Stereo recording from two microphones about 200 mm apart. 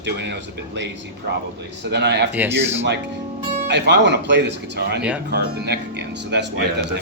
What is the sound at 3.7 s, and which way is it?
A man's voice, 60° right (ahead or behind).